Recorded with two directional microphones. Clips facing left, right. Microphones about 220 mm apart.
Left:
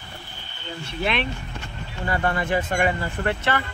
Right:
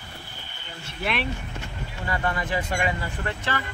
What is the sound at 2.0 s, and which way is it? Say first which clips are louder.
Speech: left 4 dB; 55° left (ahead or behind).